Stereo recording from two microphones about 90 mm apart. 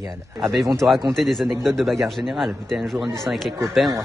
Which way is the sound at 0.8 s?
25° right (ahead or behind).